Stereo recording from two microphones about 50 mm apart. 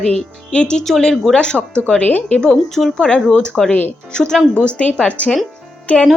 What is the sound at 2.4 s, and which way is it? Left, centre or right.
Speech, centre.